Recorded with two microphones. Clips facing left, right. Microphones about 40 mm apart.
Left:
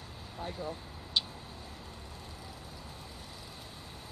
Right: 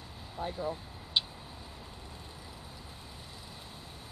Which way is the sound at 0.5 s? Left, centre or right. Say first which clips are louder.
Right 3 dB; centre.